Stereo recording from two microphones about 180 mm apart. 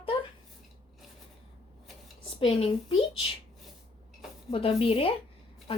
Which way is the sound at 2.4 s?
30° left (ahead or behind).